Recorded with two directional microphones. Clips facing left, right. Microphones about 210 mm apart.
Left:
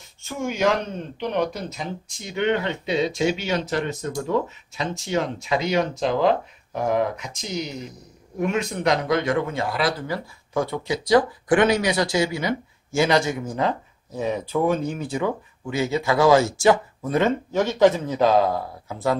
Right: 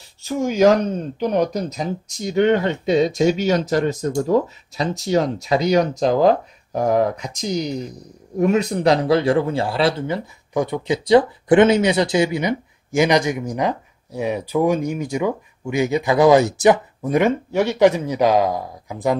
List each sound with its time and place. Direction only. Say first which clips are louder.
0.2 s speech: right 7 dB; 35° right (ahead or behind); by 19.1 s 15° right (ahead or behind)